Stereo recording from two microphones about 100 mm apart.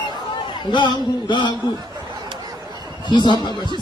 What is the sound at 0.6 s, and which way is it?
Speech, 50° left (ahead or behind).